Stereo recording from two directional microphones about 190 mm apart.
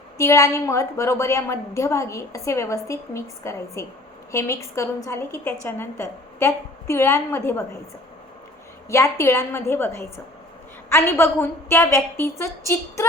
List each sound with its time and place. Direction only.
0.2 s a woman's voice: 15° left (ahead or behind)
8.9 s a woman's voice: 15° left (ahead or behind)